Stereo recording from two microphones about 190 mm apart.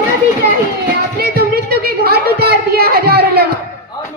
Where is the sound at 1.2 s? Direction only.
55° right (ahead or behind).